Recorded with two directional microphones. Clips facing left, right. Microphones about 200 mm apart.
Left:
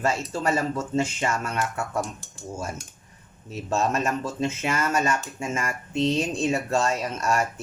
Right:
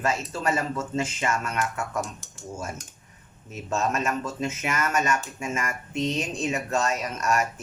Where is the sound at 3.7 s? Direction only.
35° left (ahead or behind).